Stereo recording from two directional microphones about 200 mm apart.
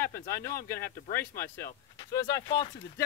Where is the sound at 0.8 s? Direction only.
50° left (ahead or behind).